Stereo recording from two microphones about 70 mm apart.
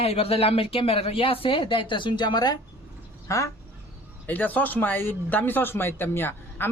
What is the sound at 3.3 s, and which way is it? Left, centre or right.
Speech, left.